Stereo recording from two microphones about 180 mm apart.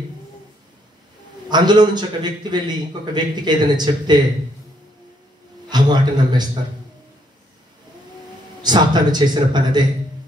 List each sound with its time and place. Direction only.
1.5 s a man's voice: 25° right (ahead or behind)
5.7 s a man's voice: 25° right (ahead or behind)
8.6 s a man's voice: 25° right (ahead or behind)